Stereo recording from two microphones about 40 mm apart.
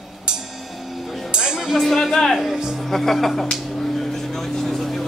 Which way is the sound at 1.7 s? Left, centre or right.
Centre.